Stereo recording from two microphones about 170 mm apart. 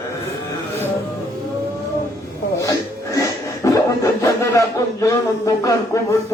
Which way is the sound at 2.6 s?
20° left (ahead or behind).